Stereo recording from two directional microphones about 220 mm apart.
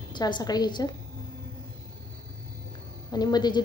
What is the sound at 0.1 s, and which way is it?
Speech, 20° left (ahead or behind).